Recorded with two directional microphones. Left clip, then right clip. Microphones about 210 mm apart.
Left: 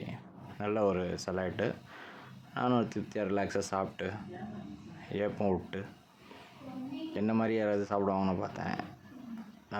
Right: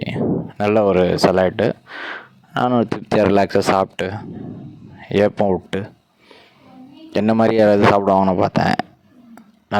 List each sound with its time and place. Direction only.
0.6 s speech: 45° right (ahead or behind)
7.1 s speech: 50° right (ahead or behind)